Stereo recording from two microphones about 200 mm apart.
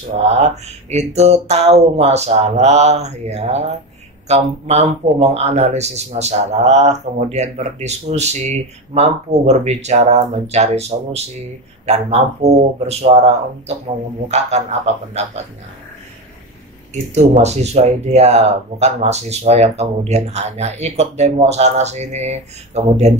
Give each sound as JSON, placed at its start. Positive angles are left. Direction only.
{"t": 0.2, "sound": "speech", "side_deg": -35}
{"t": 16.9, "sound": "speech", "side_deg": -35}